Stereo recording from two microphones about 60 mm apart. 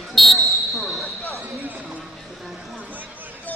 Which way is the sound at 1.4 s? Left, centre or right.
Right.